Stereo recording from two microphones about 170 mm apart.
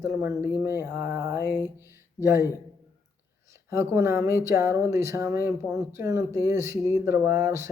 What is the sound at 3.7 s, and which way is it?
Speech, 15° right (ahead or behind).